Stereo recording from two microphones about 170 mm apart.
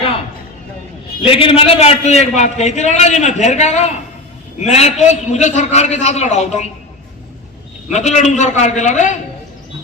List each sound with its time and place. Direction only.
1.2 s a man's voice: 35° left (ahead or behind)
7.9 s a man's voice: 45° left (ahead or behind)